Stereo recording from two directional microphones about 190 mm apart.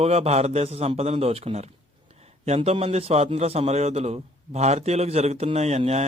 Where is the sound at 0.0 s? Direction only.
35° right (ahead or behind).